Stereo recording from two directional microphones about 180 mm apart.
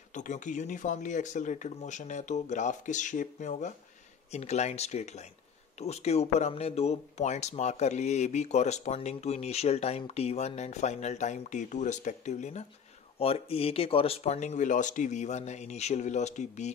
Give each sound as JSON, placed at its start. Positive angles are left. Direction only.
{"t": 0.1, "sound": "speech", "side_deg": 45}